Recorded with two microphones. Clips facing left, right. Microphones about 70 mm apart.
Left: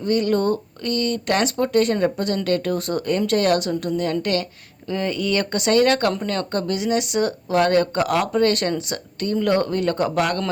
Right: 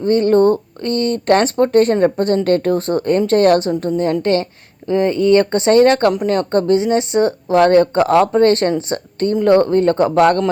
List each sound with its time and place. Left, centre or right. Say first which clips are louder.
0.0 s speech: right 8 dB; right